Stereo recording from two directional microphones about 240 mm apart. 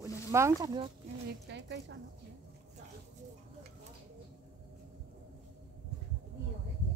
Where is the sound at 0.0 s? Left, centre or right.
Centre.